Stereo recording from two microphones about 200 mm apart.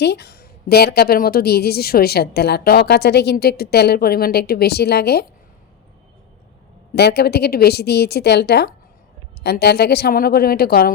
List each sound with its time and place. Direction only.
0.0 s a woman's voice: 55° left (ahead or behind)
6.9 s a woman's voice: 55° left (ahead or behind)